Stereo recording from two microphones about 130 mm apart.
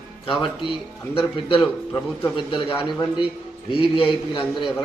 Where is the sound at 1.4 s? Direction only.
40° left (ahead or behind).